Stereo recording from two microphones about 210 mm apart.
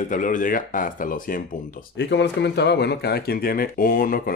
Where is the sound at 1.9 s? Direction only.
55° left (ahead or behind).